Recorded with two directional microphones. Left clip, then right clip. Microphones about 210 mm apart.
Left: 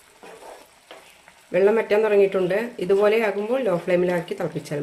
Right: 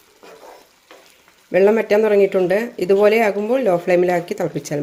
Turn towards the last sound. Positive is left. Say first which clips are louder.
# right 5 dB
turn(degrees=-30)  # may be behind; listen again after turning